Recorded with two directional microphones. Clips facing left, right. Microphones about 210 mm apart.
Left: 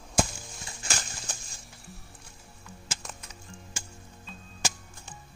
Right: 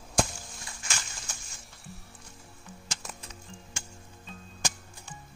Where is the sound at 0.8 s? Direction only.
35° left (ahead or behind).